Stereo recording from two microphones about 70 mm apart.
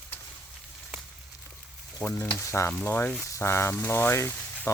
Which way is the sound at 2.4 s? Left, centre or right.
Left.